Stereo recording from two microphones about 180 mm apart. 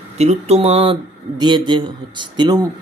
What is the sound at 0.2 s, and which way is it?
Speech, 35° right (ahead or behind).